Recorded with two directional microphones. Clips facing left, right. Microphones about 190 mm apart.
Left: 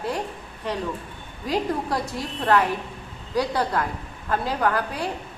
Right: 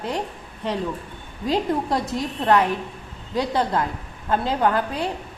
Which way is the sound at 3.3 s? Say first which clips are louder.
Right 1 dB; 25° right (ahead or behind).